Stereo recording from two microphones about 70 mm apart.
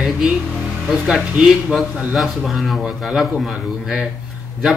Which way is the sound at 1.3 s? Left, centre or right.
Centre.